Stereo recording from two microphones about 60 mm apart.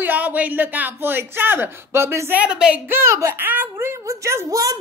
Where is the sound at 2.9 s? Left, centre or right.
Right.